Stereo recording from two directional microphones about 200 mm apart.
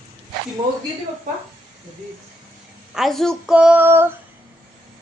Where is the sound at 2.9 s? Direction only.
Centre (ahead or behind).